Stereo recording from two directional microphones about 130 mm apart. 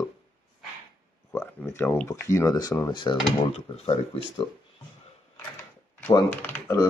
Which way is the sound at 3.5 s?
45° left (ahead or behind).